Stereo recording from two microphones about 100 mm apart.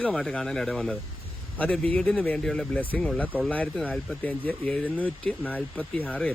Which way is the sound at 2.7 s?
15° left (ahead or behind).